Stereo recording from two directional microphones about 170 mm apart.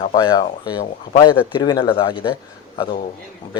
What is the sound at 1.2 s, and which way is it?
Speech, 25° left (ahead or behind).